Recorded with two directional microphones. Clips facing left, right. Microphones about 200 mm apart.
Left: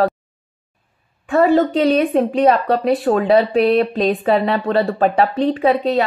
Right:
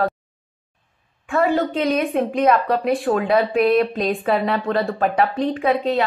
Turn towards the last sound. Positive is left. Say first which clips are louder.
# left 3 dB
turn(degrees=35)  # may be behind; listen again after turning